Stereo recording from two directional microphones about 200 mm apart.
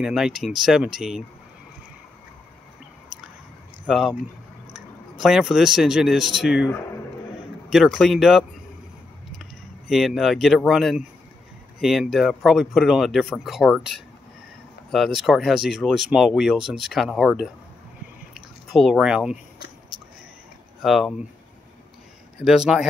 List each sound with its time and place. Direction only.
0.0 s speech: centre (ahead or behind)
3.8 s speech: centre (ahead or behind)
5.2 s speech: centre (ahead or behind)
7.7 s speech: centre (ahead or behind)
9.8 s speech: centre (ahead or behind)
18.3 s a sound: centre (ahead or behind)
20.8 s speech: centre (ahead or behind)
22.4 s speech: 5° right (ahead or behind)